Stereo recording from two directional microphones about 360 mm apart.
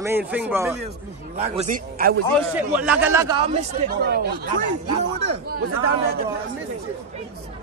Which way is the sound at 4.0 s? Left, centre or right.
Right.